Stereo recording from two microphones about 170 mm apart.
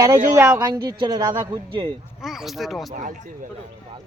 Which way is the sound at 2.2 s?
Centre (ahead or behind).